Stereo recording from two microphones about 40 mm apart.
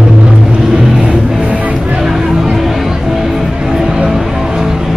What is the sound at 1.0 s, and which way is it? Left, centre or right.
Music, right.